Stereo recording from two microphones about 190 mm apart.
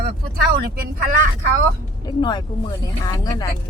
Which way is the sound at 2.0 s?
20° left (ahead or behind).